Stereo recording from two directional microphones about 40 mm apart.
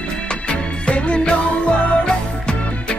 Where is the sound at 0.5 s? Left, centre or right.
Left.